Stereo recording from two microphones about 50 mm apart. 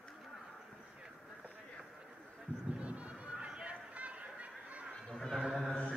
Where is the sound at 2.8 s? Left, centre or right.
Right.